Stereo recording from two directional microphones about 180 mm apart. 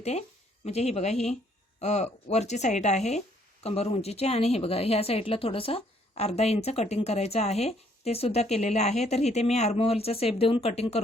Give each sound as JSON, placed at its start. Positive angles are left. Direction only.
{"t": 0.0, "sound": "speech", "side_deg": 40}